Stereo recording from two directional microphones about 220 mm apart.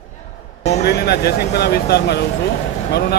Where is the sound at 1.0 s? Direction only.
45° left (ahead or behind).